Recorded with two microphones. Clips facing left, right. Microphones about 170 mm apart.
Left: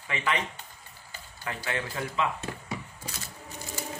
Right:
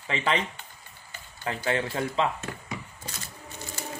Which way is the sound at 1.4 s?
30° right (ahead or behind).